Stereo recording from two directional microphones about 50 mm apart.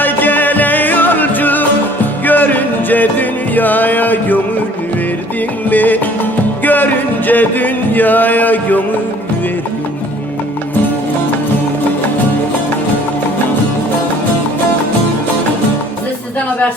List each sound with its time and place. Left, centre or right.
0.0 s music: left
5.7 s music: left